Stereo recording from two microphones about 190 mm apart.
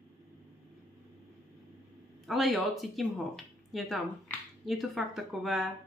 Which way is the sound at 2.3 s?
Centre (ahead or behind).